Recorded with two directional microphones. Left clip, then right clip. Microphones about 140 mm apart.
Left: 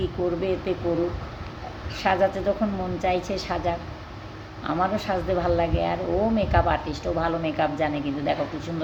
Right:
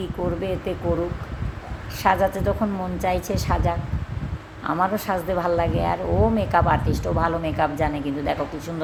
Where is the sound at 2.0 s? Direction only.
25° right (ahead or behind).